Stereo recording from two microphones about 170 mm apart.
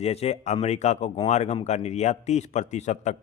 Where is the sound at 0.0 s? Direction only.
35° left (ahead or behind).